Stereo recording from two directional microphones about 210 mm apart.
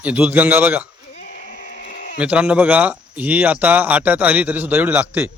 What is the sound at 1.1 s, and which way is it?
Sheep, 40° left (ahead or behind).